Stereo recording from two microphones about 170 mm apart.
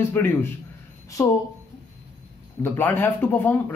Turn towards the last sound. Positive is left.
turn(degrees=10)  # may be behind; listen again after turning